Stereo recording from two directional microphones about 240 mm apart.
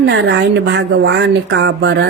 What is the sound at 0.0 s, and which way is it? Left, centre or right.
A woman's voice, right.